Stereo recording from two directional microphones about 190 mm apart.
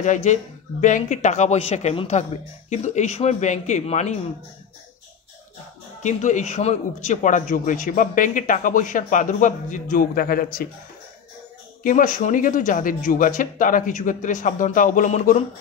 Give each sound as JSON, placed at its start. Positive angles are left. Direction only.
{"t": 0.0, "sound": "speech", "side_deg": 40}
{"t": 6.0, "sound": "speech", "side_deg": 40}
{"t": 11.8, "sound": "speech", "side_deg": 45}